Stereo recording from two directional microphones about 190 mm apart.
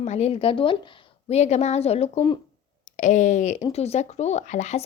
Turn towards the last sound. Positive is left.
turn(degrees=35)  # may be behind; listen again after turning